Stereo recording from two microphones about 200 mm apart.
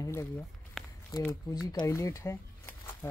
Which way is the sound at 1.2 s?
15° left (ahead or behind).